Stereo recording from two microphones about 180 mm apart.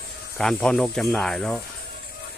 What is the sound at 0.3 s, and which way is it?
Speech, 5° left (ahead or behind).